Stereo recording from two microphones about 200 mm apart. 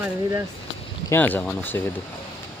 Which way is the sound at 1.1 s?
10° left (ahead or behind).